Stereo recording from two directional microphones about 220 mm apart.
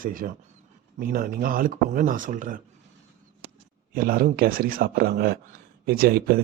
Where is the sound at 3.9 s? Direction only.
40° right (ahead or behind).